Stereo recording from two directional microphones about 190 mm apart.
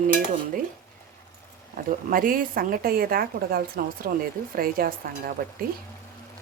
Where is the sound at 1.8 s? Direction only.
50° right (ahead or behind).